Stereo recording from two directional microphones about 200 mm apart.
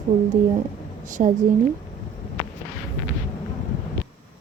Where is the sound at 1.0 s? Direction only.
40° right (ahead or behind).